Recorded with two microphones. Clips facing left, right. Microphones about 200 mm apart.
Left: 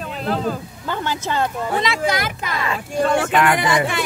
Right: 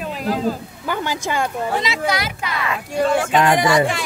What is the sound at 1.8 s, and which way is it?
Speech, 50° left (ahead or behind).